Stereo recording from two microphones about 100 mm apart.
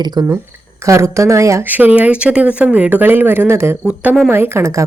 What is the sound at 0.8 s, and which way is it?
Speech, 30° right (ahead or behind).